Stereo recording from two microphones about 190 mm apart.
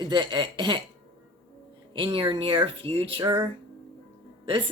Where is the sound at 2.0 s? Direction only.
30° right (ahead or behind).